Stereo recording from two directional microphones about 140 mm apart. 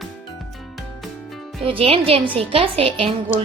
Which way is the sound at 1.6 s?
40° right (ahead or behind).